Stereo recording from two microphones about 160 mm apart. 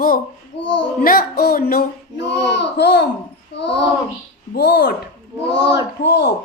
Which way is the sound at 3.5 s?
90° left.